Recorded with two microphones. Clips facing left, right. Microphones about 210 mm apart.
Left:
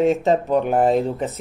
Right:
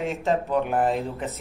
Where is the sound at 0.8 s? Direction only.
35° left (ahead or behind).